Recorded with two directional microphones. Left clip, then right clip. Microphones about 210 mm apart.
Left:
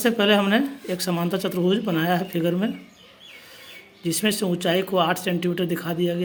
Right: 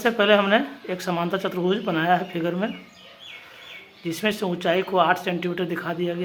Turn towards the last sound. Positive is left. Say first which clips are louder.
# left 1 dB
turn(degrees=25)  # may be behind; listen again after turning